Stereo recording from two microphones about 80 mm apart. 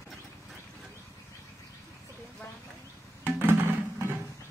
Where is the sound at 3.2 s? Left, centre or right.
Right.